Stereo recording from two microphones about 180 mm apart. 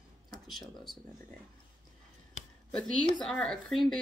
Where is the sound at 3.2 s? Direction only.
Centre (ahead or behind).